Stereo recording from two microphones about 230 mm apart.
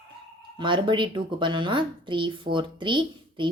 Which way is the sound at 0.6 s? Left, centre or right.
Right.